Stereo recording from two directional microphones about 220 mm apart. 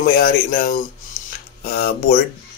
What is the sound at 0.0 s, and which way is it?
Speech, 40° left (ahead or behind).